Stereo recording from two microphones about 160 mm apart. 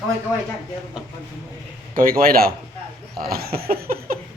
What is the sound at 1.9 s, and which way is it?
A man's voice, 60° right (ahead or behind).